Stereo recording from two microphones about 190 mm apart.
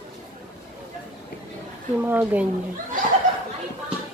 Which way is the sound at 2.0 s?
10° right (ahead or behind).